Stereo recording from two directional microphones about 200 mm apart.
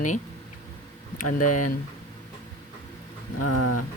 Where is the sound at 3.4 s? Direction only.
90° left.